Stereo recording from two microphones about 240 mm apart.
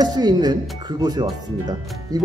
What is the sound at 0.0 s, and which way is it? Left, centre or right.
Speech, centre.